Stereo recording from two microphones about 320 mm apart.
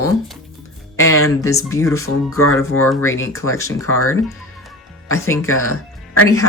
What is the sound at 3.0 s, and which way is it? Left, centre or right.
Speech, left.